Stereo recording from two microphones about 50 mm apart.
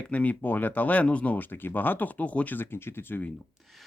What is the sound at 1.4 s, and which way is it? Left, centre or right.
Speech, left.